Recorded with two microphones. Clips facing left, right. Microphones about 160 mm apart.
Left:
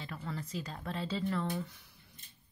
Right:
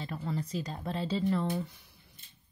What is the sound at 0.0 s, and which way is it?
Speech, 25° right (ahead or behind).